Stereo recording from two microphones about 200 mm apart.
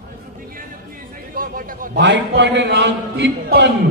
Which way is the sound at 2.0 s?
60° right (ahead or behind).